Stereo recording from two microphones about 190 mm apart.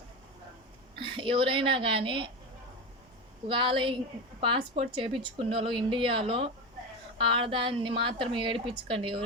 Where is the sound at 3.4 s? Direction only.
25° right (ahead or behind).